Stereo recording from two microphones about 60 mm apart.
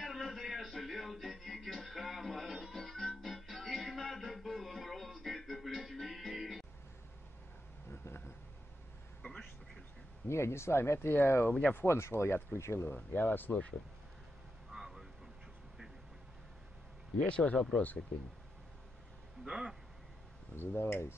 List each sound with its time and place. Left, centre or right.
0.0 s music: centre
7.9 s a sound: left
9.2 s a sound: left
10.2 s speech: left
12.9 s speech: left
14.7 s vehicle: centre
17.2 s speech: centre
19.4 s a sound: centre
20.5 s speech: left